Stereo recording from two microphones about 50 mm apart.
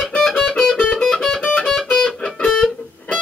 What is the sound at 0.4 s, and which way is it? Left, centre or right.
Music, centre.